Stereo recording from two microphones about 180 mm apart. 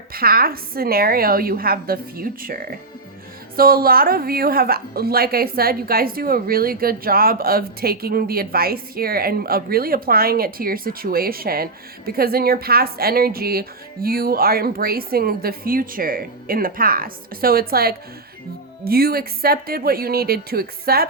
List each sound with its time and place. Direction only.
0.1 s a woman's voice: 55° right (ahead or behind)